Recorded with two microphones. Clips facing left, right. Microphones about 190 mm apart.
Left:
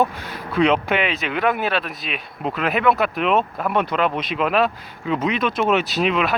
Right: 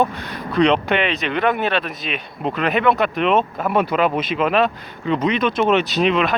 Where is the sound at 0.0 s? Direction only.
5° left (ahead or behind).